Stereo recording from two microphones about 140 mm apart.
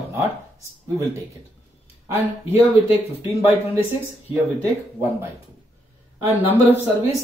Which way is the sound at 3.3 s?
20° right (ahead or behind).